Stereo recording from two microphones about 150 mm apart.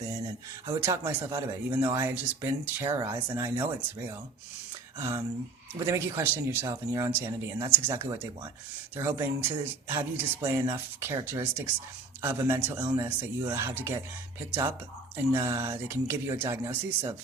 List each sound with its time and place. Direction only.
0.7 s speech: 20° right (ahead or behind)
15.1 s speech: 15° right (ahead or behind)